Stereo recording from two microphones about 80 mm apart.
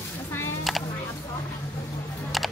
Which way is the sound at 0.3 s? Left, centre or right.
Left.